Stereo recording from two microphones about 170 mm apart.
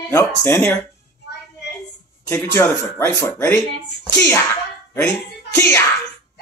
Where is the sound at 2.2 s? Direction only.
10° left (ahead or behind).